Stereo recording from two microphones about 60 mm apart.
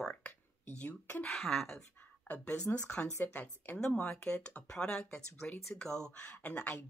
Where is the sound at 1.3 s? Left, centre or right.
Centre.